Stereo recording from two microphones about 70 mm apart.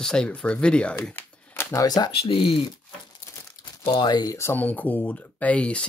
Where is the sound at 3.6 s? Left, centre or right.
Left.